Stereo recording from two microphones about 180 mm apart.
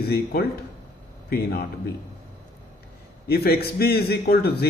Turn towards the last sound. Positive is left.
turn(degrees=60)  # may be behind; listen again after turning